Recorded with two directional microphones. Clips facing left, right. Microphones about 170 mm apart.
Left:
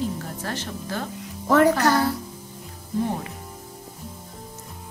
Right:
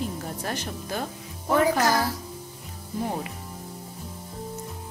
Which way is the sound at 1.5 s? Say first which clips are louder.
Left 4 dB; 65° left (ahead or behind).